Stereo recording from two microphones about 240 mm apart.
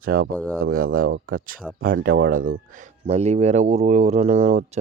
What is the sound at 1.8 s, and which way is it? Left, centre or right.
Speech, right.